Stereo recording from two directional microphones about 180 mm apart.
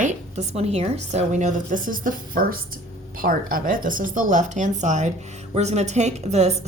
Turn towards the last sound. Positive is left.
turn(degrees=-35)  # may be behind; listen again after turning